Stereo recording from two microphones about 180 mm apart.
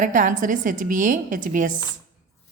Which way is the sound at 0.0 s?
45° right (ahead or behind).